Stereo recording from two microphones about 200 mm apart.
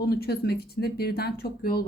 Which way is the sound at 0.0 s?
50° left (ahead or behind).